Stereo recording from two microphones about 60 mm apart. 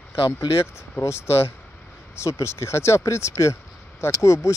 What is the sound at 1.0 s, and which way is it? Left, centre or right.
Speech, left.